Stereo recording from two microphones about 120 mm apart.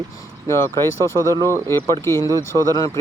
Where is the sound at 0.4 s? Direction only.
25° left (ahead or behind).